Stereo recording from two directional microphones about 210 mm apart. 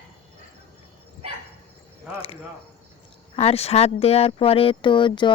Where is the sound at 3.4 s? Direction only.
30° left (ahead or behind).